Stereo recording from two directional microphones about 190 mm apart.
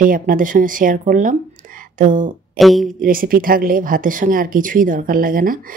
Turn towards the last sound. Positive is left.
turn(degrees=-45)  # may be behind; listen again after turning